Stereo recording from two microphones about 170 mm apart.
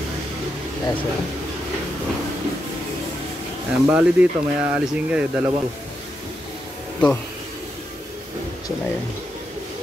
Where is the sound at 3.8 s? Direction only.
10° right (ahead or behind).